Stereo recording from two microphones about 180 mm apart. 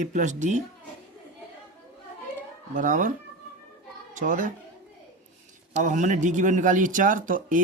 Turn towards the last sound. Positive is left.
turn(degrees=-45)  # may be behind; listen again after turning